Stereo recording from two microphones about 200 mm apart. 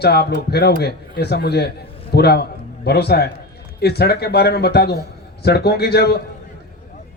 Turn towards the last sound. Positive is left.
turn(degrees=55)  # may be behind; listen again after turning